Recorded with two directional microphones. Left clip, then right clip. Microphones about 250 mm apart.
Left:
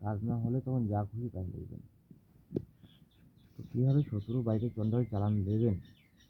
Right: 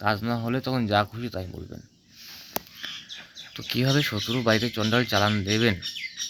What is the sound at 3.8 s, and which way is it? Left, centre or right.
Speech, right.